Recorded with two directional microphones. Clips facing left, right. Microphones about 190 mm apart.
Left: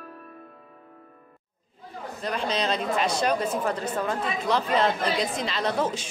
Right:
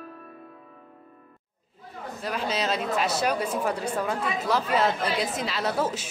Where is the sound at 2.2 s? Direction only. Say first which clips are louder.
Left 1 dB; 5° right (ahead or behind).